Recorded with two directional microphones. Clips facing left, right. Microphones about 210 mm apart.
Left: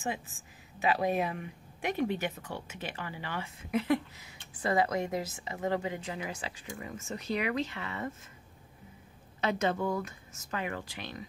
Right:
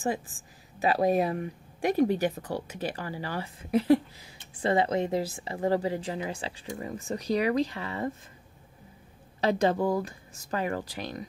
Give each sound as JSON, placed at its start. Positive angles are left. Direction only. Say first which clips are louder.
{"t": 0.7, "sound": "speech", "louder": "right 5 dB", "side_deg": -35}
{"t": 9.4, "sound": "speech", "louder": "right 5 dB", "side_deg": -35}